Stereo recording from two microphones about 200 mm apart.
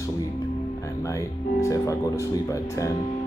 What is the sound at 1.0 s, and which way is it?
Speech, 15° left (ahead or behind).